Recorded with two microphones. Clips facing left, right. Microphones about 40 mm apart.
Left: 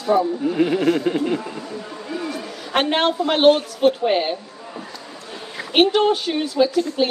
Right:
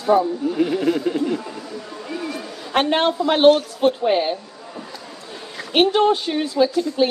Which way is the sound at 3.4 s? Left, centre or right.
Left.